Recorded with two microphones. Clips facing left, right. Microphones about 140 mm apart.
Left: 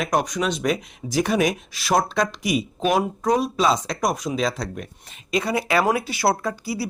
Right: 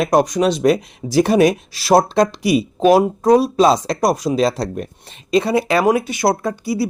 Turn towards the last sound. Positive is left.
turn(degrees=-25)  # may be behind; listen again after turning